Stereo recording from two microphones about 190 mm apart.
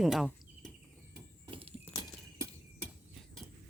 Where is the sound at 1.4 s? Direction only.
30° right (ahead or behind).